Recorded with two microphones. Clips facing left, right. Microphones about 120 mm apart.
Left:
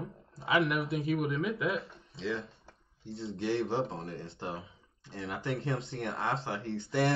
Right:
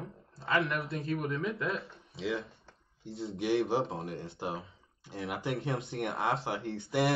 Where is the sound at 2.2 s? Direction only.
25° right (ahead or behind).